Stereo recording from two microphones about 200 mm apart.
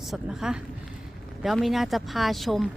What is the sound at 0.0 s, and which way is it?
A woman's voice, centre (ahead or behind).